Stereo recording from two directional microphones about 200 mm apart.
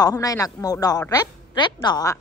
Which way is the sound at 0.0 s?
15° left (ahead or behind).